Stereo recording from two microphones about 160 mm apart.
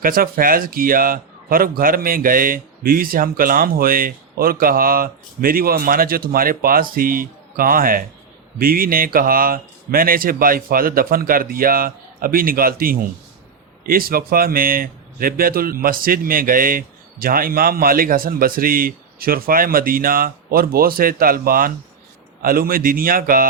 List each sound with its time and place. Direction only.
0.0 s a man's voice: 65° right (ahead or behind)